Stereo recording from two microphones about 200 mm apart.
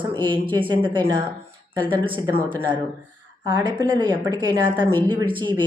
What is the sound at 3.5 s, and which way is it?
Speech, 20° right (ahead or behind).